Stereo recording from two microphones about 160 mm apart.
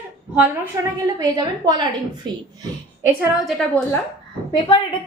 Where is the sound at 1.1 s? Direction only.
25° right (ahead or behind).